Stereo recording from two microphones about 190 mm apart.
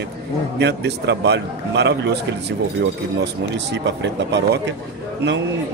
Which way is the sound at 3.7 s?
65° right (ahead or behind).